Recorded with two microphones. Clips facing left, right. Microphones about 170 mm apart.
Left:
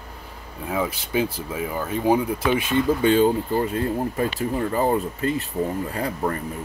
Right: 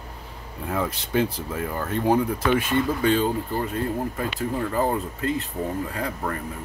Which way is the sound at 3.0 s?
30° left (ahead or behind).